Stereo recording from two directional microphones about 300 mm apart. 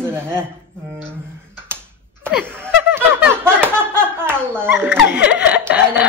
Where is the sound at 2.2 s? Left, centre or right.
Centre.